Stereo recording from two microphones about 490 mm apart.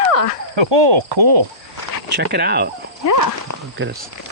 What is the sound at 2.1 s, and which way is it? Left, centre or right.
Speech, centre.